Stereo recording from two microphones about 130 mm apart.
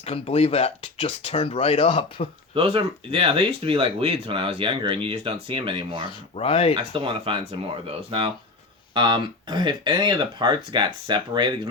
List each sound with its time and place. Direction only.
0.0 s speech: 50° left (ahead or behind)
2.6 s speech: 45° right (ahead or behind)
6.3 s speech: 45° left (ahead or behind)
6.7 s speech: 40° right (ahead or behind)